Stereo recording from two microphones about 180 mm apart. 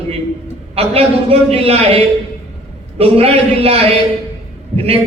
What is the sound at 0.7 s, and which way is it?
A man's voice, 35° right (ahead or behind).